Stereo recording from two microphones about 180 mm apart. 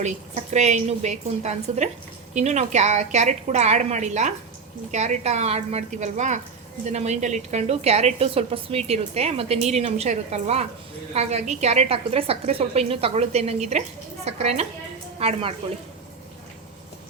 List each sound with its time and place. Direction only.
0.5 s a woman's voice: 40° right (ahead or behind)